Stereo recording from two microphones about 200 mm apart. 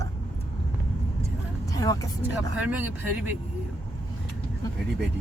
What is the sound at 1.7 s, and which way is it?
Speech, 15° left (ahead or behind).